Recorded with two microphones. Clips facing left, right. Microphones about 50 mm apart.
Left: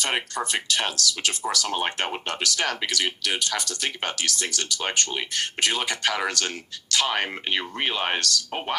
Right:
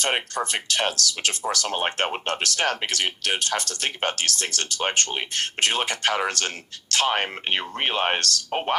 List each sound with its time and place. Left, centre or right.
0.0 s speech: right